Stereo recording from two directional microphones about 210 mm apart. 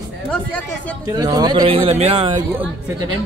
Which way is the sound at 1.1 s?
20° right (ahead or behind).